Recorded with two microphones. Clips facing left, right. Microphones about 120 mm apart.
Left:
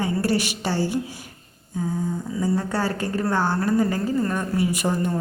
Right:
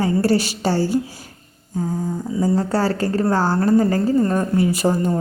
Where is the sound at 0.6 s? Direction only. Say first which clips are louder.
Right 5 dB; 40° right (ahead or behind).